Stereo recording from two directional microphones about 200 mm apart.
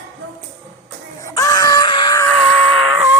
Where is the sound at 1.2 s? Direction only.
15° left (ahead or behind).